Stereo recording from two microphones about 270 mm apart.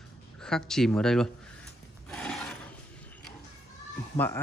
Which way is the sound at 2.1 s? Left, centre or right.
Centre.